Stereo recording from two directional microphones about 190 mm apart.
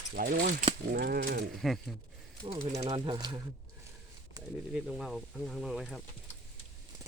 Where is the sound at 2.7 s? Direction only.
25° right (ahead or behind).